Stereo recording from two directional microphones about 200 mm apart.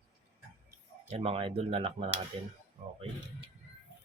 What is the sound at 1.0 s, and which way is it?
Speech, 30° right (ahead or behind).